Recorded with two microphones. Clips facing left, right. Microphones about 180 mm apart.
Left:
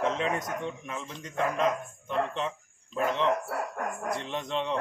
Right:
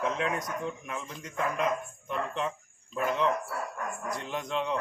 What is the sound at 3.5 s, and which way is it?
Speech, 60° left (ahead or behind).